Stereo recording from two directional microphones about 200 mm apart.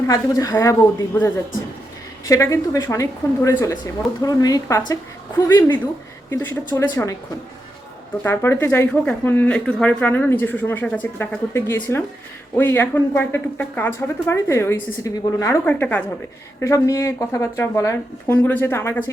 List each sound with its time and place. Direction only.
0.1 s speech: 15° left (ahead or behind)
6.3 s speech: 15° left (ahead or behind)
8.2 s speech: 10° left (ahead or behind)